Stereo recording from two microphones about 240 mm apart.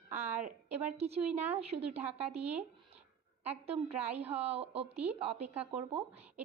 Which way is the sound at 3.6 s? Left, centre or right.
Right.